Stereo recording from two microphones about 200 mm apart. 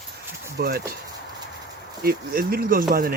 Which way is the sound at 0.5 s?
50° right (ahead or behind).